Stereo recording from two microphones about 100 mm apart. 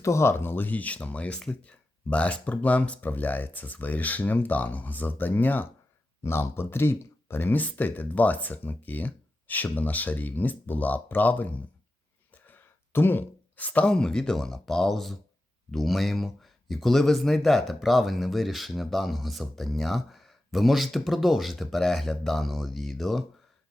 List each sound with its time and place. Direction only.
0.0 s speech: 30° left (ahead or behind); by 23.2 s centre (ahead or behind)